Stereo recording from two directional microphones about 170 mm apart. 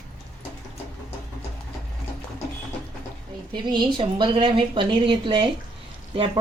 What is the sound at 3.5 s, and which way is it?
A woman's voice, 25° right (ahead or behind).